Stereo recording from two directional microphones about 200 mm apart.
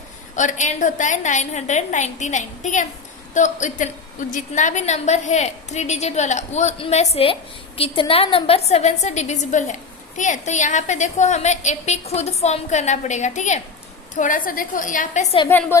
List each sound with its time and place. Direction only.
0.3 s a woman's voice: 40° left (ahead or behind)
15.4 s a woman's voice: 10° left (ahead or behind)